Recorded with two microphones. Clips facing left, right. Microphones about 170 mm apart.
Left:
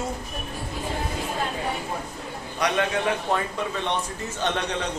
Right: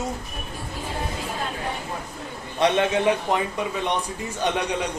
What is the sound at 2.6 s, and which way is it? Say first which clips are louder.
A man's voice: right 4 dB; 20° right (ahead or behind).